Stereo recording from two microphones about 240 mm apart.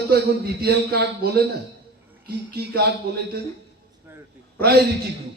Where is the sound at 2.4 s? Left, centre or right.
Right.